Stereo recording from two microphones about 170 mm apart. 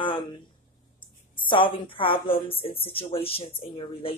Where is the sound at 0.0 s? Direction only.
30° left (ahead or behind).